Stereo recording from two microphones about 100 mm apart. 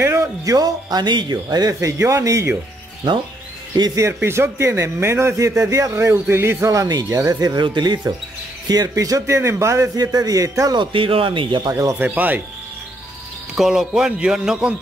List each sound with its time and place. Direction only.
0.0 s speech: 25° right (ahead or behind)
0.6 s a man's voice: 40° right (ahead or behind)
3.7 s speech: 40° right (ahead or behind)
4.0 s a man's voice: 25° right (ahead or behind)
10.8 s speech: 60° right (ahead or behind)
11.7 s a man's voice: 30° right (ahead or behind)
12.0 s a man's voice: 15° right (ahead or behind)
13.6 s a man's voice: 5° right (ahead or behind)